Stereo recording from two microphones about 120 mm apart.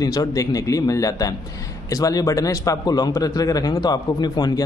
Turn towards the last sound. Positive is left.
turn(degrees=35)  # may be behind; listen again after turning